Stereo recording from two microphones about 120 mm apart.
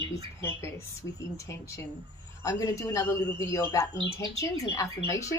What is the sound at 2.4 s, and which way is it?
A woman's voice, 25° left (ahead or behind).